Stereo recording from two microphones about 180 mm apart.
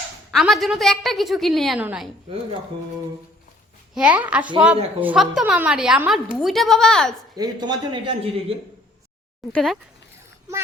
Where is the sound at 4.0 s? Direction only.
10° right (ahead or behind).